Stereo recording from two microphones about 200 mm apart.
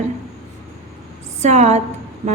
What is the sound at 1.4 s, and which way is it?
Speech, 35° right (ahead or behind).